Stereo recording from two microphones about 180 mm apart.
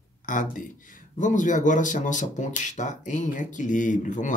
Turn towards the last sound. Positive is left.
turn(degrees=45)  # may be behind; listen again after turning